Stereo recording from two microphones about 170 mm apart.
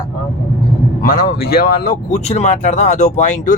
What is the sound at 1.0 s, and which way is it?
Speech, 60° left (ahead or behind).